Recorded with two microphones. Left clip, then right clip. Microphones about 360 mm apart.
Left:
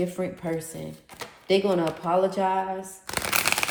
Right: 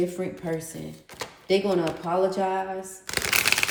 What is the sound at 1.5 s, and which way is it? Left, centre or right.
Speech, left.